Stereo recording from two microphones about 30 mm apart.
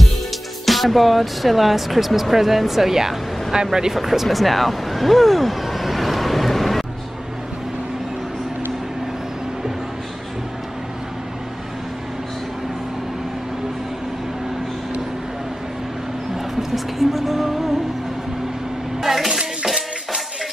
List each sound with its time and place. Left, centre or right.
0.7 s speech: centre
3.5 s speech: right
3.9 s speech: centre
4.3 s vehicle: centre
16.3 s music: centre
18.9 s a sound: centre